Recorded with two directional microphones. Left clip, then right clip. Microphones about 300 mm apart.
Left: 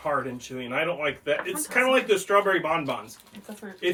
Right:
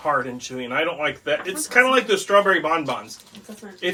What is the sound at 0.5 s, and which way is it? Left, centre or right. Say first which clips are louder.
Speech: right 4 dB; centre.